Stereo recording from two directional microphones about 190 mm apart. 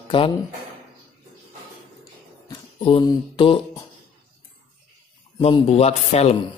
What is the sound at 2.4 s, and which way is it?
Mantra, 25° left (ahead or behind).